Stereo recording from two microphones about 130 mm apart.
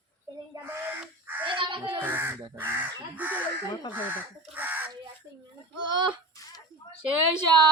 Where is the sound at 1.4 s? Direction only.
40° right (ahead or behind).